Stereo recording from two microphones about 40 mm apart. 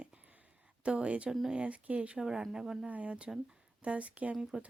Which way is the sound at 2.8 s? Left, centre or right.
Right.